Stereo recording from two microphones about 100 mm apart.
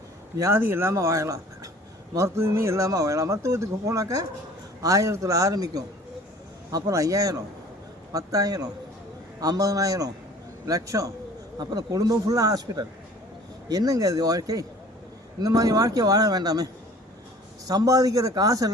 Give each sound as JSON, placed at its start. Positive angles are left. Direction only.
{"t": 0.3, "sound": "speech", "side_deg": -25}
{"t": 17.7, "sound": "speech", "side_deg": -35}